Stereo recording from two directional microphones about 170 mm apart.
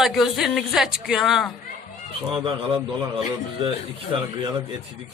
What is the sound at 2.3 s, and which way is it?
Speech, 30° right (ahead or behind).